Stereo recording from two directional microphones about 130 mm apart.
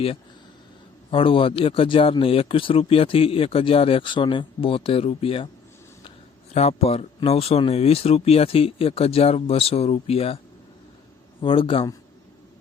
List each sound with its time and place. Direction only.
1.1 s speech: 45° left (ahead or behind)
6.5 s speech: 55° left (ahead or behind)
11.4 s speech: 40° left (ahead or behind)